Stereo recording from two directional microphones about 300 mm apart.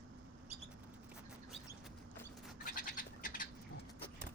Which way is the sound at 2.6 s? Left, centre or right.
Left.